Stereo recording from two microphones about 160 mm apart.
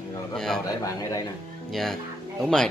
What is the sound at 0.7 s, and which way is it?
Speech, 20° left (ahead or behind).